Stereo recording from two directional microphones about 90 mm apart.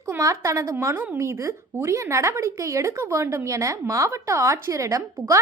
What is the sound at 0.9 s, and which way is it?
Speech, 20° right (ahead or behind).